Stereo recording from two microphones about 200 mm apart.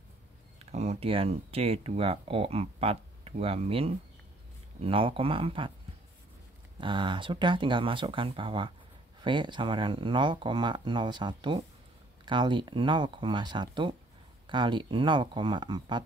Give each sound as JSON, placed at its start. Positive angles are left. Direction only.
{"t": 0.7, "sound": "speech", "side_deg": -35}
{"t": 6.8, "sound": "speech", "side_deg": -25}